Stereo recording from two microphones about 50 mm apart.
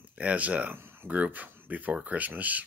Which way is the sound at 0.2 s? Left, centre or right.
Right.